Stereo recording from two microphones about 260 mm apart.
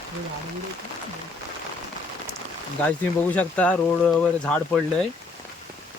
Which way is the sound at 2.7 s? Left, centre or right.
Centre.